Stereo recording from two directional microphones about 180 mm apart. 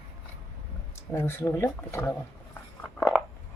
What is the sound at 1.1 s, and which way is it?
Speech, 15° left (ahead or behind).